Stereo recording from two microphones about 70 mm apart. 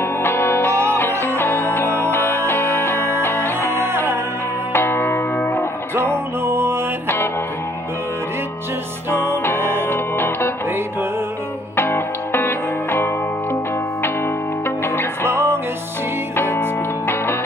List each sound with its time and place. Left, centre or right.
0.0 s music: left
3.9 s music: right
4.7 s music: left
6.4 s music: right
9.6 s music: right
9.8 s music: left
11.7 s music: left
15.2 s music: right